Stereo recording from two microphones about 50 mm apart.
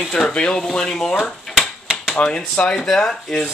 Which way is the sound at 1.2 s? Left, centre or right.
Centre.